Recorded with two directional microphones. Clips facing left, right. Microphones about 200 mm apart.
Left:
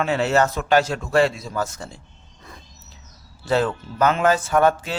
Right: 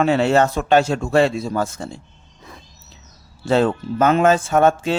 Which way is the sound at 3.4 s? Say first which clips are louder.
Right 4 dB; 25° right (ahead or behind).